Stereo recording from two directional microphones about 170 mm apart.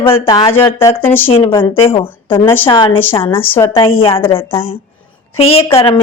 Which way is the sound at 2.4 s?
10° left (ahead or behind).